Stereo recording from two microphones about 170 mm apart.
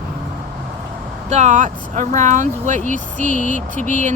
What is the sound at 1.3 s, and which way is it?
Speech, 45° right (ahead or behind).